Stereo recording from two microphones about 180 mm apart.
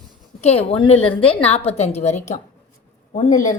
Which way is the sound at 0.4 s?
35° left (ahead or behind).